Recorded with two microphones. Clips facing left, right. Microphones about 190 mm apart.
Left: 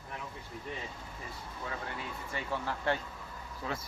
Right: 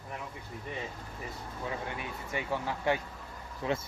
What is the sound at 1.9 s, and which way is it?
Speech, 15° right (ahead or behind).